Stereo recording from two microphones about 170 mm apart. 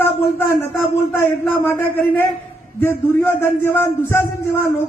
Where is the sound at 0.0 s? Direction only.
15° left (ahead or behind).